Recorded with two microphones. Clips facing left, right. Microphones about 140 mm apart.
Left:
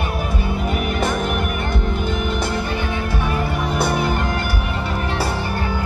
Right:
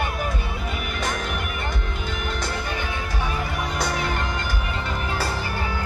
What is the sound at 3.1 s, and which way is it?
Music, 10° left (ahead or behind).